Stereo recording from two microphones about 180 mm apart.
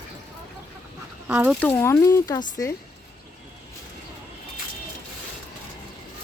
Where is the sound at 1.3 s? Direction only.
5° right (ahead or behind).